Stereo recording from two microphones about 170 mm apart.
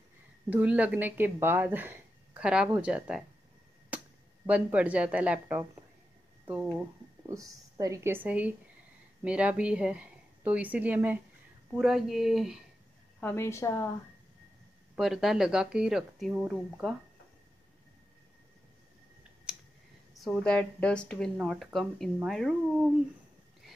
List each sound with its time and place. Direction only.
0.5 s speech: 10° right (ahead or behind)
3.9 s a sound: 10° right (ahead or behind)
4.5 s speech: 10° right (ahead or behind)
7.2 s a woman's voice: 20° right (ahead or behind); by 12.5 s centre (ahead or behind)
13.2 s a woman's voice: 15° left (ahead or behind)
15.0 s a woman's voice: centre (ahead or behind)
20.2 s a woman's voice: 5° left (ahead or behind)